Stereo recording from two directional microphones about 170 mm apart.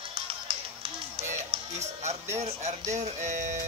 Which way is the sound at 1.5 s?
30° right (ahead or behind).